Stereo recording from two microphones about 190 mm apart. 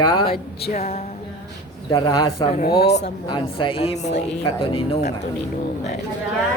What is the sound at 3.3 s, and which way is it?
Speech, 25° left (ahead or behind).